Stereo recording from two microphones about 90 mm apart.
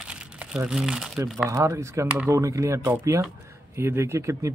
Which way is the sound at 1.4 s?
35° right (ahead or behind).